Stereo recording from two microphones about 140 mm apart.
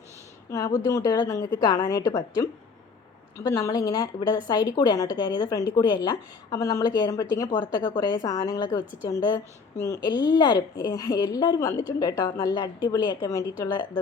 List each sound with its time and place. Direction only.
0.5 s a woman's voice: 25° left (ahead or behind)